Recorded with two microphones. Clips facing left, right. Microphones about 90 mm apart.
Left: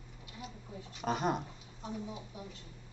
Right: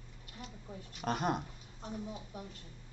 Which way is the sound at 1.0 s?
Centre (ahead or behind).